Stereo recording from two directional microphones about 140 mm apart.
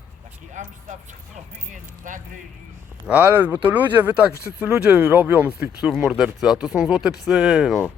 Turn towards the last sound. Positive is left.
turn(degrees=-5)  # may be behind; listen again after turning